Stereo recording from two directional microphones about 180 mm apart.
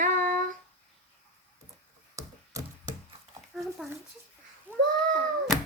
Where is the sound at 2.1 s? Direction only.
20° right (ahead or behind).